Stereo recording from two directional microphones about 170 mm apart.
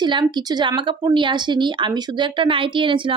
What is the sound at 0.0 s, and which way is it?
A woman's voice, 25° right (ahead or behind).